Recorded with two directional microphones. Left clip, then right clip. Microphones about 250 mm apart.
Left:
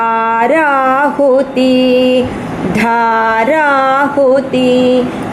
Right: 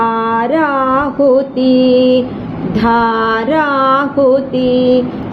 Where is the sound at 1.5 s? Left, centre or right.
Left.